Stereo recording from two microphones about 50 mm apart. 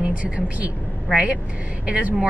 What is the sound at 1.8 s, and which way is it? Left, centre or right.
Speech, right.